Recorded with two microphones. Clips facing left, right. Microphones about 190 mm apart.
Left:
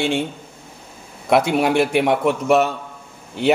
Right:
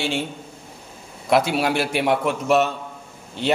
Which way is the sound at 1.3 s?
60° left (ahead or behind).